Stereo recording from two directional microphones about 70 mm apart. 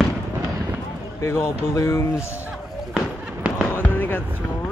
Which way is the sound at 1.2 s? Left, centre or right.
Left.